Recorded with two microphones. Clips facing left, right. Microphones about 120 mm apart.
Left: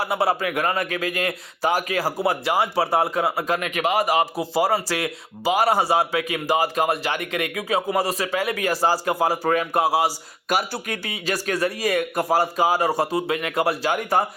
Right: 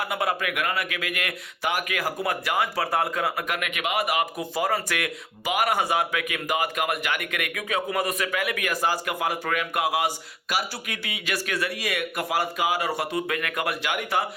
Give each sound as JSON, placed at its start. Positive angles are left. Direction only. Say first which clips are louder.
{"t": 0.0, "sound": "a man's voice", "louder": "left 5 dB", "side_deg": 30}
{"t": 10.5, "sound": "a man's voice", "louder": "left 5 dB", "side_deg": 45}